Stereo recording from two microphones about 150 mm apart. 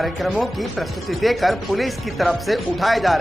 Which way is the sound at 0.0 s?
Centre (ahead or behind).